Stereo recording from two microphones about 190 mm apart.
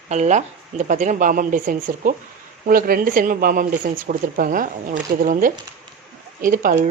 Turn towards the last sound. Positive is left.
turn(degrees=-45)  # may be behind; listen again after turning